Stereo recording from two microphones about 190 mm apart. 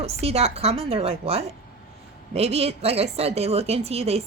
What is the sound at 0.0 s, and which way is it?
A woman's voice, 35° right (ahead or behind).